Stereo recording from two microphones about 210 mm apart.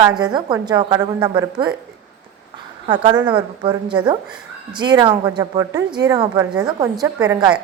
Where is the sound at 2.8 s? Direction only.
25° right (ahead or behind).